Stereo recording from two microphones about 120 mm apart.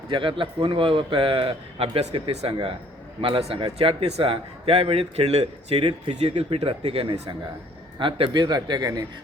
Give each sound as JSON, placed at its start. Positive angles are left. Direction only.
{"t": 0.1, "sound": "a man's voice", "side_deg": -45}